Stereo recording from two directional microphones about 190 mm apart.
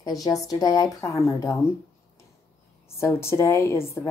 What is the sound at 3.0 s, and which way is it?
A woman's voice, 15° left (ahead or behind).